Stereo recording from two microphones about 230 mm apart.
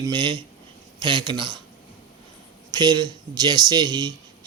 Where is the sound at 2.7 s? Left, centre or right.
Centre.